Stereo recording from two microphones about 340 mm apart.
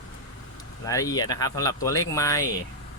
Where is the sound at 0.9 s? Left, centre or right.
Centre.